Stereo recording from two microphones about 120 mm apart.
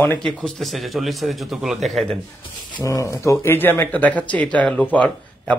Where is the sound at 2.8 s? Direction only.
25° left (ahead or behind).